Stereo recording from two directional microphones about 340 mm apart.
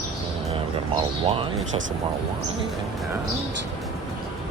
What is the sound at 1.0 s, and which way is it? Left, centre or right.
Speech, centre.